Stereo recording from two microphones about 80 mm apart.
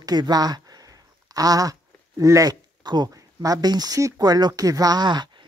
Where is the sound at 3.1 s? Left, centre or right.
Right.